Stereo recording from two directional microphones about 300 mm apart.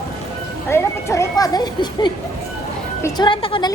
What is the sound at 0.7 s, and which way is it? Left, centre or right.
Speech, centre.